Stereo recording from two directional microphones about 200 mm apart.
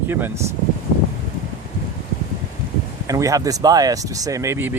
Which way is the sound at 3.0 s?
15° right (ahead or behind).